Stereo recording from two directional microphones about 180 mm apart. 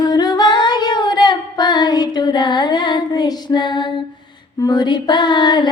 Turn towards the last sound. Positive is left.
turn(degrees=25)  # may be behind; listen again after turning